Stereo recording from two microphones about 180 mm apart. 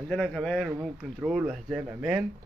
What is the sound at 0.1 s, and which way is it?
Speech, 5° left (ahead or behind).